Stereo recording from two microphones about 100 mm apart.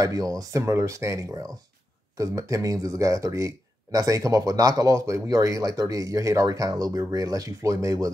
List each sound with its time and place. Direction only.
0.0 s speech: 35° right (ahead or behind)